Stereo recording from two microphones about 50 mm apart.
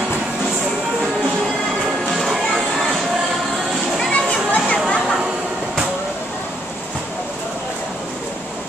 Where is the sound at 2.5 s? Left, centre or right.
Centre.